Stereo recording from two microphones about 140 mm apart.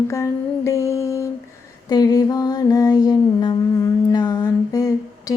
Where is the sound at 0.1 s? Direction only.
20° left (ahead or behind).